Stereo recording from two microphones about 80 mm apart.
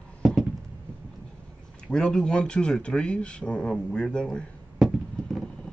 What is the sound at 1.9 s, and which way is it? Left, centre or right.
Speech, centre.